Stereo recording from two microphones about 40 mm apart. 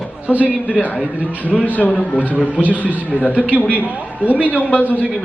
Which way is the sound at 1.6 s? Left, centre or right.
Left.